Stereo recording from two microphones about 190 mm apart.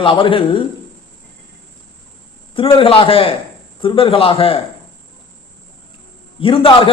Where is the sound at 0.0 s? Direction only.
25° left (ahead or behind).